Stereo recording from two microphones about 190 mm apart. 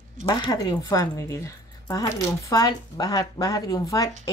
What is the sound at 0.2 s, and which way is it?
Speech, 25° left (ahead or behind).